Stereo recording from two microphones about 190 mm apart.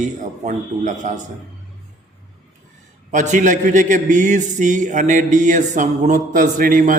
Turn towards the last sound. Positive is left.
turn(degrees=-45)  # may be behind; listen again after turning